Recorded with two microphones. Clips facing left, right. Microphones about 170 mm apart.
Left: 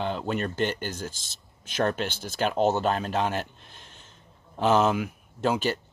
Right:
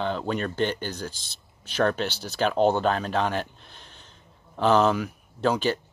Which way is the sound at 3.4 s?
45° left (ahead or behind).